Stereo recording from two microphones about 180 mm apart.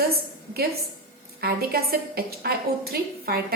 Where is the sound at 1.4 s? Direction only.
60° right (ahead or behind).